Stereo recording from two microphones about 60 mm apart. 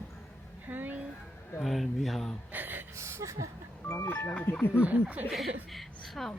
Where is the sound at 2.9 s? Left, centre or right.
Right.